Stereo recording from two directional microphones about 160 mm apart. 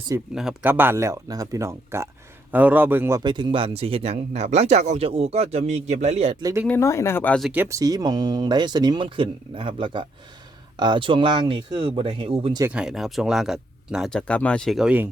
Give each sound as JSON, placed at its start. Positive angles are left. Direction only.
{"t": 0.3, "sound": "speech", "side_deg": -5}
{"t": 3.2, "sound": "speech", "side_deg": -30}
{"t": 6.4, "sound": "speech", "side_deg": -20}
{"t": 6.7, "sound": "speech", "side_deg": 15}
{"t": 7.3, "sound": "speech", "side_deg": 0}
{"t": 7.6, "sound": "speech", "side_deg": -20}
{"t": 12.6, "sound": "speech", "side_deg": -5}